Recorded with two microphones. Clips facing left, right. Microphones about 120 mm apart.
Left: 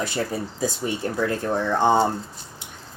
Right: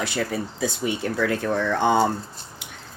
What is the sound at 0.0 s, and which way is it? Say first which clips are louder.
Speech: even; 40° left (ahead or behind).